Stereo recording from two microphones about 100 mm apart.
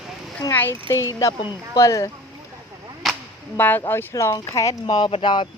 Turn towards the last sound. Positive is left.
turn(degrees=55)  # may be behind; listen again after turning